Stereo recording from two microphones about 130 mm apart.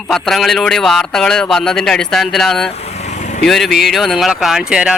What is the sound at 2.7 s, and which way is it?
Vehicle, 55° left (ahead or behind).